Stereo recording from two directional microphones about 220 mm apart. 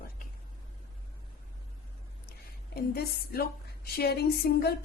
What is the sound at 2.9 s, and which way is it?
Speech, 45° left (ahead or behind).